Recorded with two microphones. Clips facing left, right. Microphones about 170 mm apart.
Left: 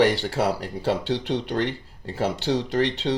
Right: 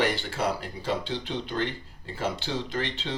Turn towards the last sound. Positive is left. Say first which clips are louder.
# left 8 dB
turn(degrees=75)  # may be behind; listen again after turning